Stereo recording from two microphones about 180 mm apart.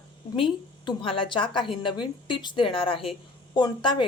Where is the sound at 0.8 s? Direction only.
30° left (ahead or behind).